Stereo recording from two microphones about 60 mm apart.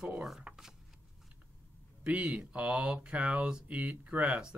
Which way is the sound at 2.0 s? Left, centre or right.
Right.